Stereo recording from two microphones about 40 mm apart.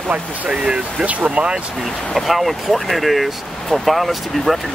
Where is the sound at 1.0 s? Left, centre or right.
Right.